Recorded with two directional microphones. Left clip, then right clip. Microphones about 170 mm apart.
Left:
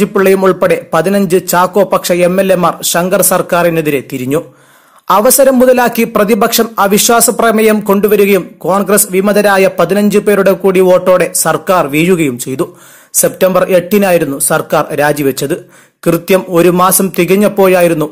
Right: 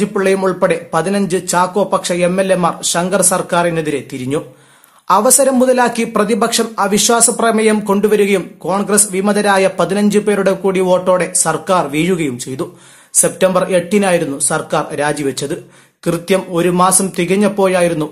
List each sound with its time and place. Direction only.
0.0 s speech: 30° left (ahead or behind)